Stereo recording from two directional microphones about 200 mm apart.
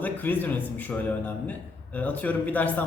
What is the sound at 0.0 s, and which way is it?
A man's voice, 10° left (ahead or behind).